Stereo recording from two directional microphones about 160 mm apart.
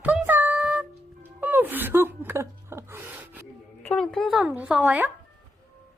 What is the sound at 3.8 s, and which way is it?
A woman's voice, 5° left (ahead or behind).